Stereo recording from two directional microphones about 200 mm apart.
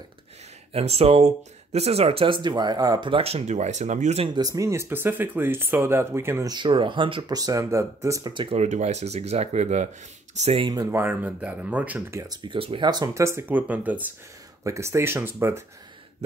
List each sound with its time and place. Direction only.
0.7 s speech: 30° right (ahead or behind)
4.4 s speech: 15° right (ahead or behind); by 10.7 s 30° right (ahead or behind)
10.7 s speech: 15° right (ahead or behind)